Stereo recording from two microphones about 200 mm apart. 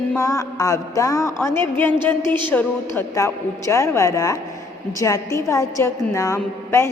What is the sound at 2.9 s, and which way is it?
A woman's voice, 15° left (ahead or behind).